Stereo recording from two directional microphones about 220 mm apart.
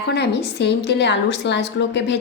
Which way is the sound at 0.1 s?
50° left (ahead or behind).